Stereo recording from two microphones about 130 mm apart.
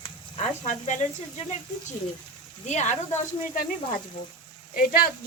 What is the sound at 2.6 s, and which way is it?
Speech, 65° left (ahead or behind).